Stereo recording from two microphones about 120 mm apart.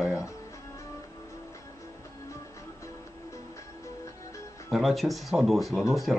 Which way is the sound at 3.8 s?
25° left (ahead or behind).